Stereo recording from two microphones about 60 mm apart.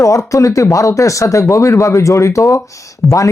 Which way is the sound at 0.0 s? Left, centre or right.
Left.